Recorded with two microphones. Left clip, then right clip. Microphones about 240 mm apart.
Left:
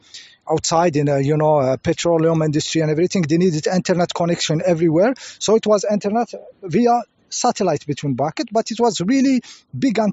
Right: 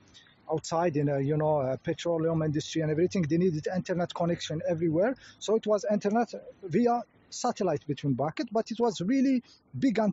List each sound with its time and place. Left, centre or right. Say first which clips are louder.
0.5 s speech: left 12 dB; left